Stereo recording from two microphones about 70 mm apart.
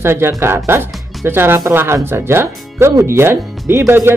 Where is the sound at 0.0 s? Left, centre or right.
Right.